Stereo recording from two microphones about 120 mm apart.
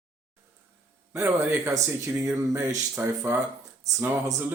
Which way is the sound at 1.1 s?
20° right (ahead or behind).